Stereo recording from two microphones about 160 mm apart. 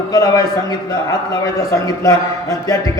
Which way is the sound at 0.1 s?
20° left (ahead or behind).